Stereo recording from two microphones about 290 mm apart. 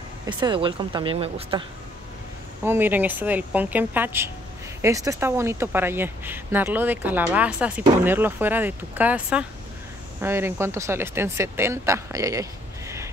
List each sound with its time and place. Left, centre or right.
0.3 s speech: centre
2.6 s speech: centre